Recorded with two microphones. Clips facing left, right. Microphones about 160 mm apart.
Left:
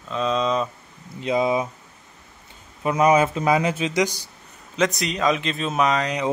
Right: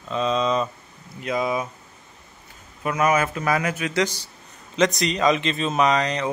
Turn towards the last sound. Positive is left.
turn(degrees=5)  # may be behind; listen again after turning